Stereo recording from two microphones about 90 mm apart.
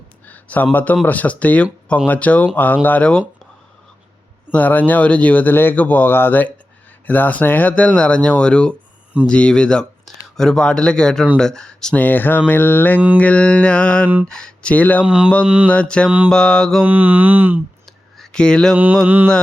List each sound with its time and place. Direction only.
0.3 s speech: 20° left (ahead or behind)
4.5 s speech: 20° left (ahead or behind)
12.0 s speech: 20° left (ahead or behind)
15.0 s a sound: 10° right (ahead or behind)
15.7 s speech: 10° left (ahead or behind)
16.0 s a sound: 15° right (ahead or behind)
16.3 s speech: 10° left (ahead or behind)
16.8 s speech: 20° right (ahead or behind)
18.2 s a sound: 10° left (ahead or behind)
19.0 s speech: 20° right (ahead or behind)